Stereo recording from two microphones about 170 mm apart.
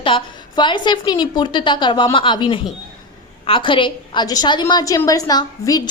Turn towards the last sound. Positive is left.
turn(degrees=25)  # may be behind; listen again after turning